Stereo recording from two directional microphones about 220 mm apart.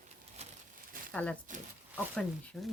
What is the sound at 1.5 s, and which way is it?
Speech, 35° right (ahead or behind).